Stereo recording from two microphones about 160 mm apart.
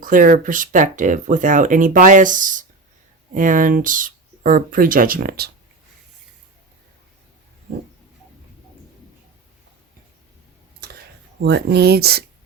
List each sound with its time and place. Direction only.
0.0 s speech: 60° right (ahead or behind)
10.8 s whispering: 75° right (ahead or behind)
11.3 s speech: 90° right